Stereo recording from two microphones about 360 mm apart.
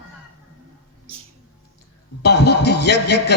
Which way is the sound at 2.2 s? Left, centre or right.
Left.